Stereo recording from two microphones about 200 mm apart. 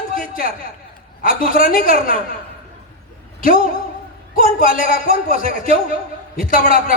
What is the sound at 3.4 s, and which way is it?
A man's voice, 45° left (ahead or behind).